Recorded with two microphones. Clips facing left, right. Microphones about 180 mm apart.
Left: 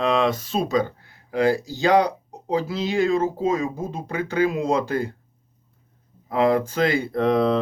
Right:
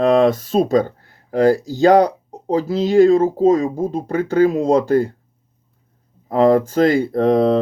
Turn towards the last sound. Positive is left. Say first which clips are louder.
# right 5 dB
turn(degrees=-40)  # may be behind; listen again after turning